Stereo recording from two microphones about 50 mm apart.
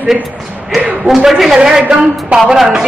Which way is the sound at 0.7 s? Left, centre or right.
Centre.